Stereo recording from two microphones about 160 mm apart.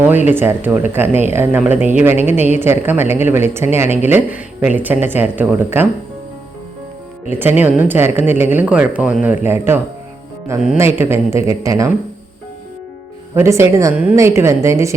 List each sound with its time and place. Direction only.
0.3 s speech: 15° right (ahead or behind)
7.3 s speech: 15° right (ahead or behind)
13.3 s a woman's voice: 15° right (ahead or behind)